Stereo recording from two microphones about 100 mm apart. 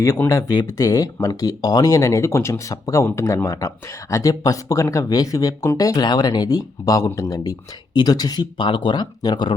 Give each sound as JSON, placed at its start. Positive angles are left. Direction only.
{"t": 0.0, "sound": "speech", "side_deg": 30}